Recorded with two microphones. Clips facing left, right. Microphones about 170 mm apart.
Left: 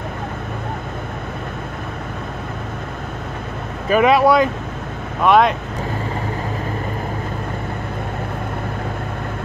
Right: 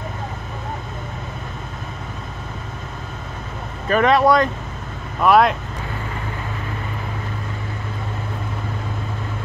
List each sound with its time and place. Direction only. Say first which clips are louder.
3.9 s speech: left 2 dB; 5° left (ahead or behind)